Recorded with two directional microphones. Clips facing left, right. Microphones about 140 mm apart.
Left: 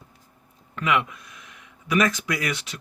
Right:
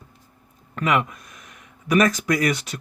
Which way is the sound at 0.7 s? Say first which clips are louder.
Right 2 dB; 45° right (ahead or behind).